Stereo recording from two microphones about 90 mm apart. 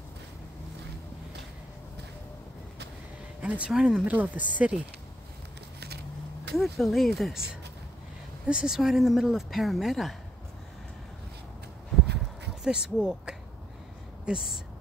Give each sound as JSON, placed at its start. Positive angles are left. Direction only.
{"t": 3.3, "sound": "speech", "side_deg": -15}
{"t": 6.5, "sound": "speech", "side_deg": 0}
{"t": 8.5, "sound": "speech", "side_deg": -10}
{"t": 12.6, "sound": "speech", "side_deg": -5}